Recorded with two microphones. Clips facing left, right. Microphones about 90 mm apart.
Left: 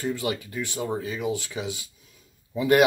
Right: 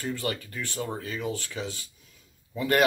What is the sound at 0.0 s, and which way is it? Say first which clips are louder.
Speech: left 3 dB; 10° left (ahead or behind).